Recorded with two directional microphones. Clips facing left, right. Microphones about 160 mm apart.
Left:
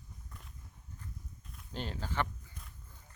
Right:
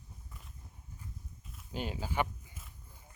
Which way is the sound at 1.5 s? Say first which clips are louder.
Right 2 dB; 5° right (ahead or behind).